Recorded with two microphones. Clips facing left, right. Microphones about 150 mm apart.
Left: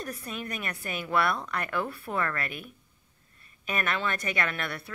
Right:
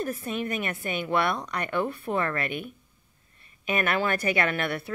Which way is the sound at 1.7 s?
20° right (ahead or behind).